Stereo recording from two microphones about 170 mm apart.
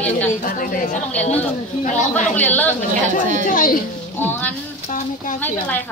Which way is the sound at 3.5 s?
55° left (ahead or behind).